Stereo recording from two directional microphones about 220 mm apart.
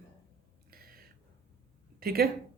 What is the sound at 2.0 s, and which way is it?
Speech, 40° right (ahead or behind).